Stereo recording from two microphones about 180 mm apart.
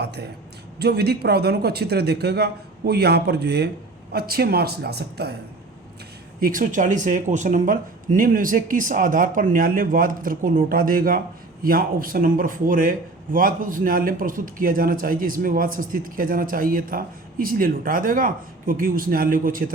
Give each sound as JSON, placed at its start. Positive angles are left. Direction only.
{"t": 0.0, "sound": "a man's voice", "side_deg": -65}
{"t": 6.4, "sound": "speech", "side_deg": -50}